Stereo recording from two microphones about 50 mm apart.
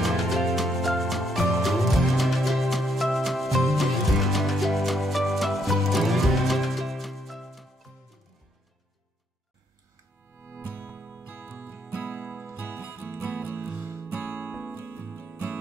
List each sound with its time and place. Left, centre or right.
0.0 s music: centre
10.4 s music: right
14.5 s music: right